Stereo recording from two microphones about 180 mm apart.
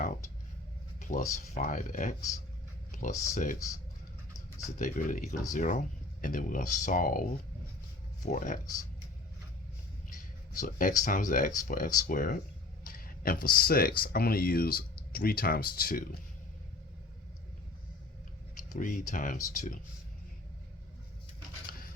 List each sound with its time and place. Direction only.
0.9 s speech: 40° left (ahead or behind)
2.9 s a sound: 45° left (ahead or behind)
3.3 s speech: 45° left (ahead or behind)
10.1 s speech: 45° left (ahead or behind)
18.7 s speech: 45° left (ahead or behind)